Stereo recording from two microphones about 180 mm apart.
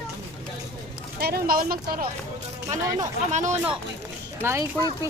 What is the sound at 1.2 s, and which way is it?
Speech, 60° right (ahead or behind).